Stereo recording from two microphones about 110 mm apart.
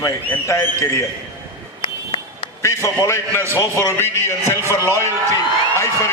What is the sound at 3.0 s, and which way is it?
A man's voice, 25° left (ahead or behind).